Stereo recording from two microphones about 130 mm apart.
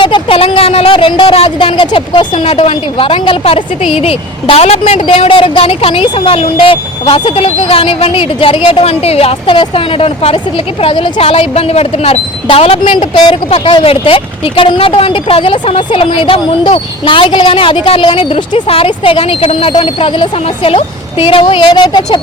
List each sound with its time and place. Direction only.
0.0 s a woman's voice: 40° left (ahead or behind)